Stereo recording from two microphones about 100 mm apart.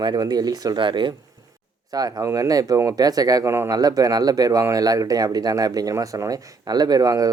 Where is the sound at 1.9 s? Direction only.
40° right (ahead or behind).